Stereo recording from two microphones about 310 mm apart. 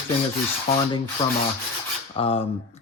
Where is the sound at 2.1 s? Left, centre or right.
Centre.